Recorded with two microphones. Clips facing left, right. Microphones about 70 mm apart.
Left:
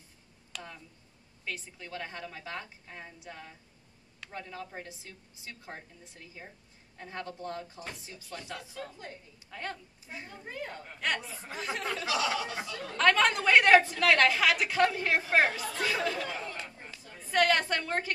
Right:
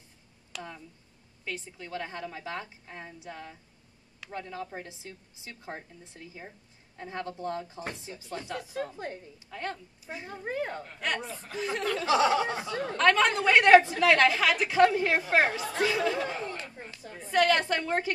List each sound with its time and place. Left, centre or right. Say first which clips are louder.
0.5 s a sound: right 4 dB; centre
1.4 s a woman's voice: right 2 dB; centre
4.8 s a woman's voice: right 3 dB; right
7.2 s a woman's voice: right 4 dB; right
8.9 s a woman's voice: right 7 dB; right
9.5 s a woman's voice: right 3 dB; centre
10.1 s a woman's voice: right 4 dB; right
10.4 s speech: right 9 dB; right
10.8 s a woman's voice: right 1 dB; centre
12.1 s speech: right 8 dB; right
12.9 s a woman's voice: right 1 dB; centre
14.8 s a woman's voice: right 4 dB; centre
15.3 s a woman's voice: right 1 dB; centre
17.2 s a woman's voice: right 2 dB; centre